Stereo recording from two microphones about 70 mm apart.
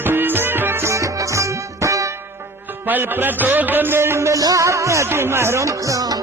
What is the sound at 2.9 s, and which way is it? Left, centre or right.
A man's voice, right.